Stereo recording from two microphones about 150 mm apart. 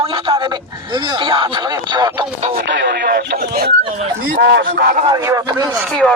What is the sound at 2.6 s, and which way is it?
Speech, 90° right.